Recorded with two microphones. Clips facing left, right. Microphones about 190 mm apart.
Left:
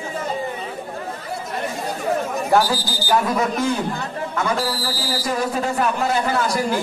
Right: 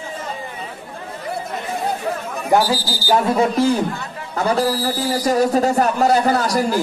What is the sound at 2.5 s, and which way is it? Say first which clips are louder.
Speech: right 2 dB; 10° right (ahead or behind).